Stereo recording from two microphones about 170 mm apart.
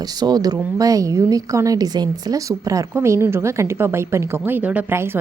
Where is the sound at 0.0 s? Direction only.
25° right (ahead or behind).